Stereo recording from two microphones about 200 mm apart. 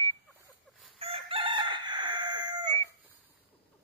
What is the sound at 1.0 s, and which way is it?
Chicken, 25° right (ahead or behind).